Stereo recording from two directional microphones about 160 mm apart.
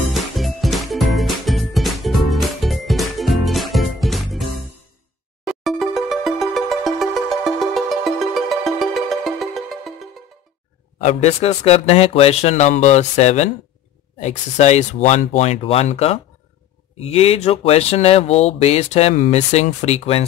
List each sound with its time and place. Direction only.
0.1 s music: centre (ahead or behind)
11.1 s speech: 40° left (ahead or behind)